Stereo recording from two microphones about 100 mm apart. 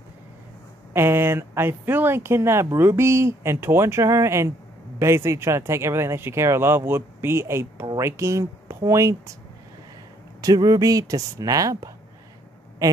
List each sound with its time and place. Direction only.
0.9 s speech: 25° right (ahead or behind)
10.4 s speech: 40° right (ahead or behind)